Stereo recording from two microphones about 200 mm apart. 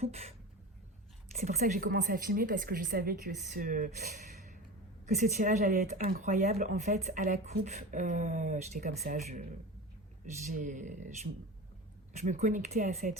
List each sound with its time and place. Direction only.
0.0 s speech: 30° right (ahead or behind)
1.4 s a woman's voice: 35° right (ahead or behind)
5.2 s speech: 40° right (ahead or behind)
10.5 s speech: 40° right (ahead or behind)